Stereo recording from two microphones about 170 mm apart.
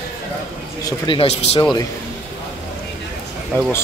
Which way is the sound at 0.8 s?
30° left (ahead or behind).